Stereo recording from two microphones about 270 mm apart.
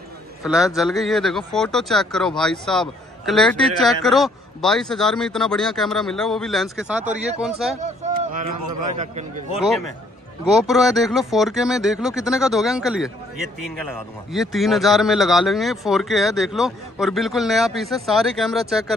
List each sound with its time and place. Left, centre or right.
0.5 s speech: centre
8.6 s a man's voice: right
8.9 s a man's voice: right
10.7 s speech: centre